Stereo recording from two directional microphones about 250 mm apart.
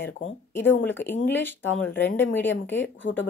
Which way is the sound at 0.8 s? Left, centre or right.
Centre.